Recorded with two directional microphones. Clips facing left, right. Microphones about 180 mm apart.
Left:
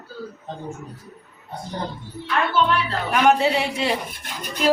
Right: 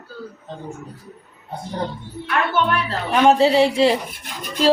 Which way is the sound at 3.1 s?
30° right (ahead or behind).